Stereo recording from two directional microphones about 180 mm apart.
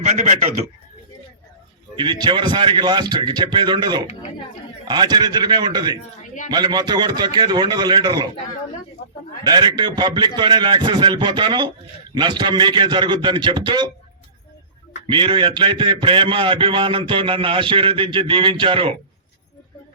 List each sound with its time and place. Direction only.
0.0 s a man's voice: 40° right (ahead or behind)
2.0 s a man's voice: 25° right (ahead or behind)
9.0 s speech: 55° left (ahead or behind)
9.4 s a man's voice: 25° right (ahead or behind)
15.0 s a man's voice: 25° right (ahead or behind)